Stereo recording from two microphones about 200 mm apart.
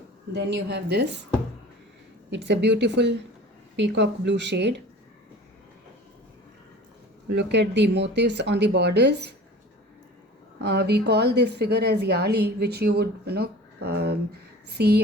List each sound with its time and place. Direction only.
0.3 s a woman's voice: 60° right (ahead or behind)
2.3 s a woman's voice: 60° right (ahead or behind)
7.3 s a woman's voice: 55° right (ahead or behind)
10.6 s a woman's voice: 55° right (ahead or behind)